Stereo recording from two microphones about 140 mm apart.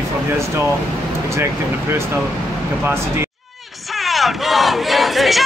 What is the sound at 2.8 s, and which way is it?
Speech, 15° right (ahead or behind).